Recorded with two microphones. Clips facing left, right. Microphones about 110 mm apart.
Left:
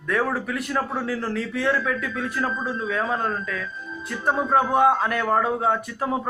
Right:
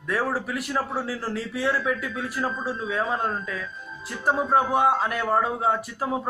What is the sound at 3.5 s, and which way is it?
Speech, 30° right (ahead or behind).